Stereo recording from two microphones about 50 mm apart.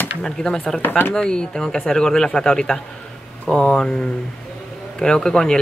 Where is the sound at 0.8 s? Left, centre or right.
Left.